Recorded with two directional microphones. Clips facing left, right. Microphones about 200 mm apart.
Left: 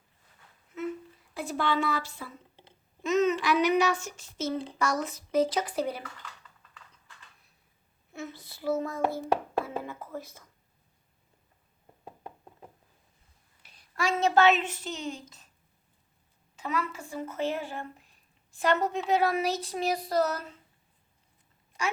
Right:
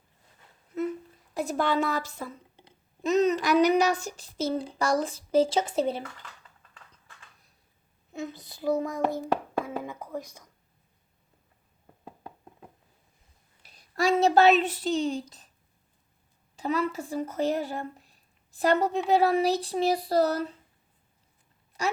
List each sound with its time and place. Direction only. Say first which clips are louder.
1.3 s a woman's voice: right 3 dB; 40° right (ahead or behind)
3.0 s child singing: right 2 dB; 35° right (ahead or behind)
8.1 s a child's voice: right 4 dB; 15° right (ahead or behind)
13.6 s a woman's voice: right 5 dB; 40° right (ahead or behind)
16.6 s child singing: right 5 dB; 35° right (ahead or behind)